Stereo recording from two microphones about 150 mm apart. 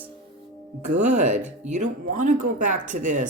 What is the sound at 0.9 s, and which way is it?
Speech, 50° right (ahead or behind).